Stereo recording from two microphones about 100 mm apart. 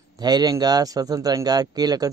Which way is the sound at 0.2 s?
40° right (ahead or behind).